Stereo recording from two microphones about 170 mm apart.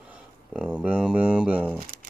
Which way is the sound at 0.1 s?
5° right (ahead or behind).